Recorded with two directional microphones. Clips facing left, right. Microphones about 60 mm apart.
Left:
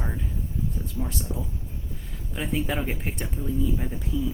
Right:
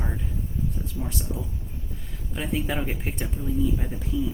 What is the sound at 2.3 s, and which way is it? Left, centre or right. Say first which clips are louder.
Speech: even; centre.